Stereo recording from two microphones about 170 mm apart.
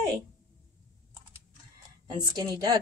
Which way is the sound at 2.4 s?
20° right (ahead or behind).